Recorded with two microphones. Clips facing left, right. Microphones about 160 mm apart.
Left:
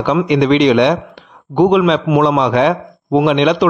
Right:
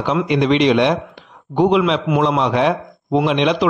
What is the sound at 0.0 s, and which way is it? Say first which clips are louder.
A man's voice: left 4 dB; 65° left (ahead or behind).